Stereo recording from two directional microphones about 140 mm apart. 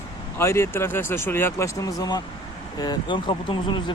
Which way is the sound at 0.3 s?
20° left (ahead or behind).